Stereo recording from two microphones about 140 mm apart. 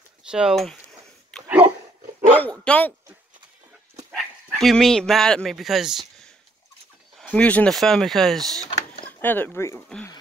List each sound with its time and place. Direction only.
0.3 s speech: 5° right (ahead or behind)
2.3 s speech: 10° left (ahead or behind)
4.1 s speech: centre (ahead or behind)
7.2 s speech: 10° left (ahead or behind)
9.2 s speech: 15° left (ahead or behind)